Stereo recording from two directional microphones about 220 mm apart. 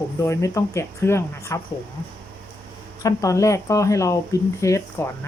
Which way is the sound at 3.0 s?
15° left (ahead or behind).